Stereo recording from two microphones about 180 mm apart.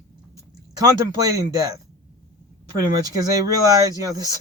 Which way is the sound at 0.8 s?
20° right (ahead or behind).